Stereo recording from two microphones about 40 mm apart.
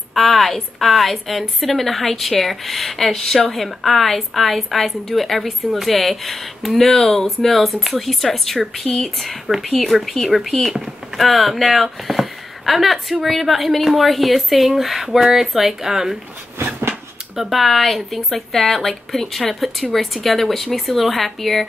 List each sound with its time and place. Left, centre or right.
0.1 s a woman's voice: centre
16.5 s a sound: right
17.4 s a woman's voice: centre